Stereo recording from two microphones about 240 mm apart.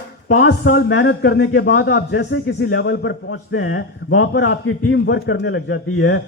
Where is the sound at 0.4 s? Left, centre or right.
Left.